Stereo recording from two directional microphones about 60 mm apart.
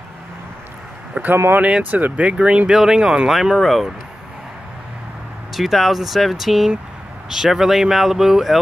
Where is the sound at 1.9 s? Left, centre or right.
Right; by 3.9 s centre.